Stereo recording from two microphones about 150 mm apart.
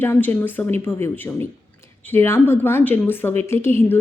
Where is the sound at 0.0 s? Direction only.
15° left (ahead or behind).